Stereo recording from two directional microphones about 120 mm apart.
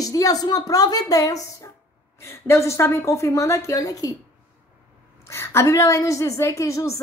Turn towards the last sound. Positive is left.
turn(degrees=25)  # may be behind; listen again after turning